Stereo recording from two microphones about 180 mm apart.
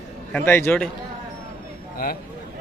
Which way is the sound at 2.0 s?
50° left (ahead or behind).